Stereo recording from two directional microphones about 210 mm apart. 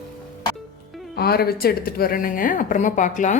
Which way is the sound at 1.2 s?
45° left (ahead or behind).